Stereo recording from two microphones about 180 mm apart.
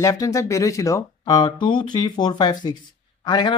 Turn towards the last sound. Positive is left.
turn(degrees=25)  # may be behind; listen again after turning